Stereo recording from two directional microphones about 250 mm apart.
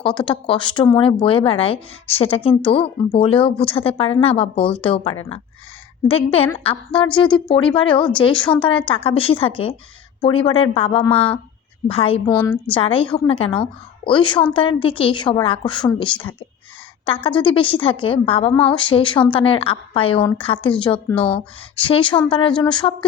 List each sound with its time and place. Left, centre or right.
0.0 s speech: centre
17.2 s speech: centre
18.5 s a woman's voice: centre
18.8 s speech: centre